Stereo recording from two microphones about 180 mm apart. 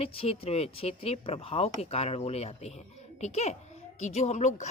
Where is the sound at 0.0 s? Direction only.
35° left (ahead or behind).